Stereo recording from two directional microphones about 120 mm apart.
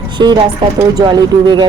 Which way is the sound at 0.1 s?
40° right (ahead or behind).